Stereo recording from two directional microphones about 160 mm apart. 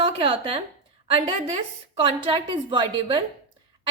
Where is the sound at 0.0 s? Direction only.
35° right (ahead or behind).